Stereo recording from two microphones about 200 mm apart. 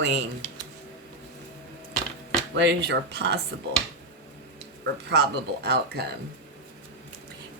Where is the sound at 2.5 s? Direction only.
60° right (ahead or behind).